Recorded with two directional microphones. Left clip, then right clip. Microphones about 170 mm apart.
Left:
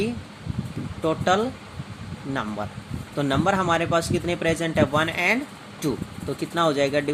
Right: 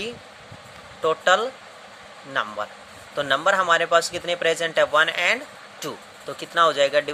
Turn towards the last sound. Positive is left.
turn(degrees=-15)  # may be behind; listen again after turning